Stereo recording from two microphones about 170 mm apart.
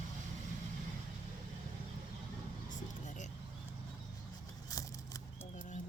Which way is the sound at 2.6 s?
45° left (ahead or behind).